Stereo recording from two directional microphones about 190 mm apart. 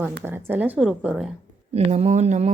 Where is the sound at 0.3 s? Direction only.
10° right (ahead or behind).